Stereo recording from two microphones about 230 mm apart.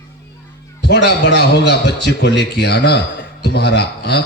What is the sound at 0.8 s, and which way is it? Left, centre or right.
A man's voice, left.